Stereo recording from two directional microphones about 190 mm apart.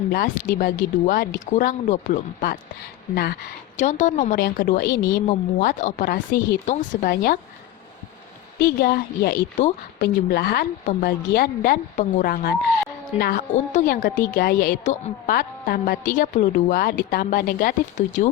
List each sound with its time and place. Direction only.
0.1 s a woman's voice: 50° left (ahead or behind)
3.8 s a woman's voice: 40° left (ahead or behind)
4.4 s a woman's voice: 55° left (ahead or behind)
5.2 s a woman's voice: 40° left (ahead or behind)
8.6 s a woman's voice: 55° left (ahead or behind)
9.6 s a woman's voice: 40° left (ahead or behind)
10.2 s a woman's voice: 55° left (ahead or behind)